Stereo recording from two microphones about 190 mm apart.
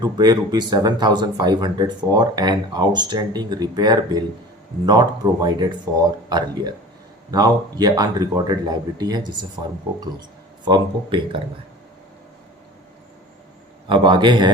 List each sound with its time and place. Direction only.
0.0 s speech: 20° right (ahead or behind)
10.7 s speech: 25° right (ahead or behind)
13.8 s speech: 25° right (ahead or behind)